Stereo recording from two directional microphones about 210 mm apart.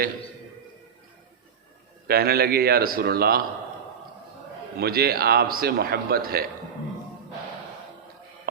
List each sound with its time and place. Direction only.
2.0 s a man's voice: 45° right (ahead or behind)
4.8 s a man's voice: 45° right (ahead or behind)